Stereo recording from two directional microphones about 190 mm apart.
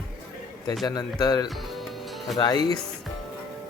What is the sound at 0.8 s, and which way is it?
Speech, 20° left (ahead or behind).